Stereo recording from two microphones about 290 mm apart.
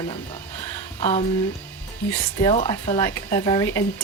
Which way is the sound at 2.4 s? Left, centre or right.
Centre.